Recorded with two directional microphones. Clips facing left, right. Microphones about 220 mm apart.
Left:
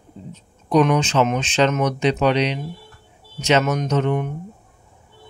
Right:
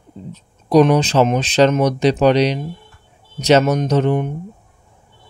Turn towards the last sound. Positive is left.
turn(degrees=-35)  # may be behind; listen again after turning